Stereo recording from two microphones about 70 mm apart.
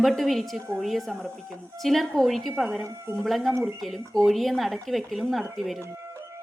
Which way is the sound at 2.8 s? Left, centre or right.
Right.